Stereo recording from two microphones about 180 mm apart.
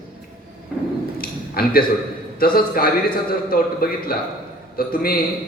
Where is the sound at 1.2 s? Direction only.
55° left (ahead or behind).